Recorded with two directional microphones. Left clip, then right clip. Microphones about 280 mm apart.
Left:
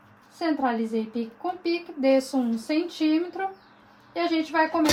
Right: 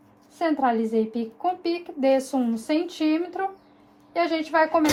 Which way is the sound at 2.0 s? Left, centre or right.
Right.